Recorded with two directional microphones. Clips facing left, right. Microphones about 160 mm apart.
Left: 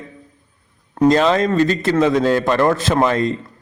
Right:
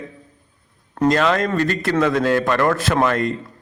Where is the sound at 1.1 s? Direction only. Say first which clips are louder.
Left 2 dB; 25° left (ahead or behind).